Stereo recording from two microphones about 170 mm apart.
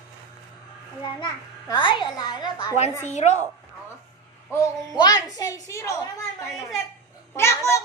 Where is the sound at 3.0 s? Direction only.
40° left (ahead or behind).